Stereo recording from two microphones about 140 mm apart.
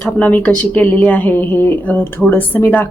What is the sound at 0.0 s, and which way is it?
Speech, 10° left (ahead or behind).